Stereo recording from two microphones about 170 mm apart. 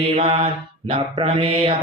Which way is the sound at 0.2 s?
35° right (ahead or behind).